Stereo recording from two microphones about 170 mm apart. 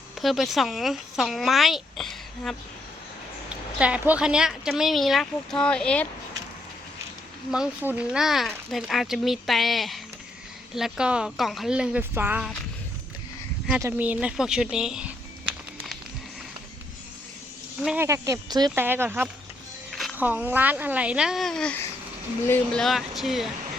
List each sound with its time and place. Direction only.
0.2 s speech: centre (ahead or behind)
7.5 s speech: 5° right (ahead or behind)
13.8 s music: 10° right (ahead or behind)
17.8 s speech: 15° right (ahead or behind)
18.7 s speech: 10° right (ahead or behind)
19.9 s music: centre (ahead or behind)
20.1 s speech: 10° right (ahead or behind)